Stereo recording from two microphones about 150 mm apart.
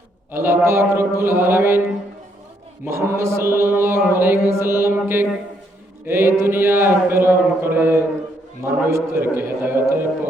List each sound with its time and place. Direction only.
0.3 s mantra: 15° right (ahead or behind)
2.8 s mantra: 15° right (ahead or behind)